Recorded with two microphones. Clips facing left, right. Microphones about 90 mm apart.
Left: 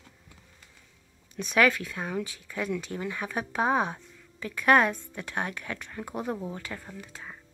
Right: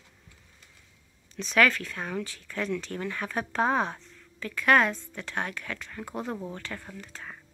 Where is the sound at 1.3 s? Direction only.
15° left (ahead or behind).